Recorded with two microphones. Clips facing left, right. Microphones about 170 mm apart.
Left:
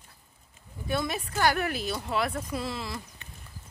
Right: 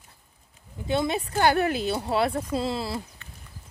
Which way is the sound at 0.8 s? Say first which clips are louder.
Right 5 dB; 25° right (ahead or behind).